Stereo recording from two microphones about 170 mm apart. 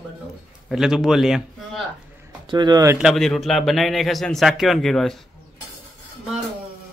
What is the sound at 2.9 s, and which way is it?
A man's voice, centre (ahead or behind).